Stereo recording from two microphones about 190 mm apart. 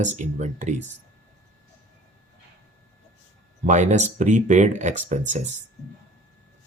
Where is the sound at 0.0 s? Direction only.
40° right (ahead or behind).